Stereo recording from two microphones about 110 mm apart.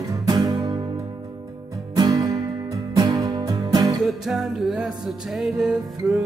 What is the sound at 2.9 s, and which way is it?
Music, 30° right (ahead or behind).